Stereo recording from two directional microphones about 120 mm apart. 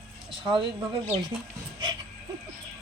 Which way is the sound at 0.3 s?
40° right (ahead or behind).